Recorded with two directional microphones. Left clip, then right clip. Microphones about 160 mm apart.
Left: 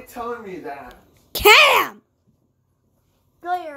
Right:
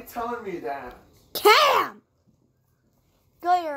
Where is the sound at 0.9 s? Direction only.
15° left (ahead or behind).